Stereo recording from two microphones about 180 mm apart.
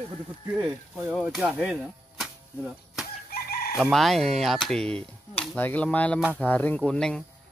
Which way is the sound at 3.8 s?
Centre (ahead or behind).